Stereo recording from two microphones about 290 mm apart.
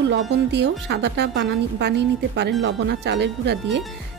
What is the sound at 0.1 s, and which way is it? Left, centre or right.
A woman's voice, right.